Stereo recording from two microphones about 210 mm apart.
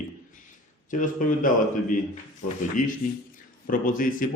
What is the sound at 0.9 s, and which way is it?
Speech, 40° left (ahead or behind).